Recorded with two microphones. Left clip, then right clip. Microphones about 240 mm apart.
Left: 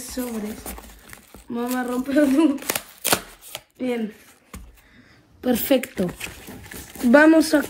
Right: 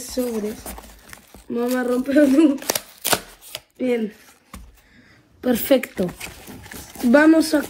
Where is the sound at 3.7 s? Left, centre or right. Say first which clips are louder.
Right 4 dB; centre.